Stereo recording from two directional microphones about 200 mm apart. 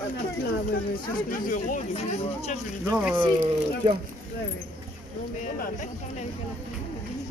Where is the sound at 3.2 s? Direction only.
25° right (ahead or behind).